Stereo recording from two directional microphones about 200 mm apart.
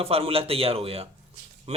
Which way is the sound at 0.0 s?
30° right (ahead or behind).